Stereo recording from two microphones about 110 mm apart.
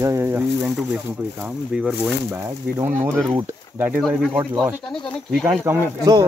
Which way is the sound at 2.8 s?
20° right (ahead or behind).